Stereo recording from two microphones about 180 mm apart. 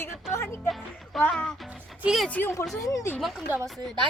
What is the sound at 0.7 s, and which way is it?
Speech, 5° left (ahead or behind).